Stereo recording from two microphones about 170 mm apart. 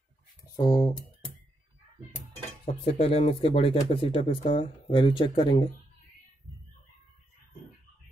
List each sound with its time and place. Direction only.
0.6 s speech: 25° left (ahead or behind)
2.6 s speech: 35° left (ahead or behind)